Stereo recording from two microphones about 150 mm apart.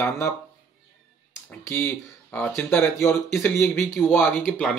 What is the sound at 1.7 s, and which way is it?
Speech, 15° left (ahead or behind).